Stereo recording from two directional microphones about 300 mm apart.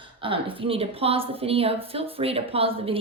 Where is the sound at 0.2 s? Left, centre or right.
Centre.